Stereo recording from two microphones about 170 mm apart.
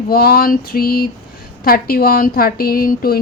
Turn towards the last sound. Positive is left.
turn(degrees=60)  # may be behind; listen again after turning